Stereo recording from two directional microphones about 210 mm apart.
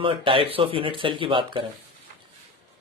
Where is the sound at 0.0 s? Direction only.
25° right (ahead or behind).